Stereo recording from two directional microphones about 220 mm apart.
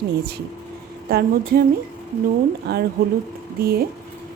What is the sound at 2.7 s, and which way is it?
Speech, 45° right (ahead or behind).